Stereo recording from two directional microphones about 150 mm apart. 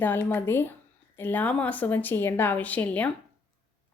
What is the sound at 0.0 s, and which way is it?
Speech, 15° left (ahead or behind).